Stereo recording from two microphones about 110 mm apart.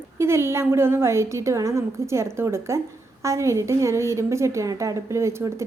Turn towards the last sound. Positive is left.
turn(degrees=-25)  # may be behind; listen again after turning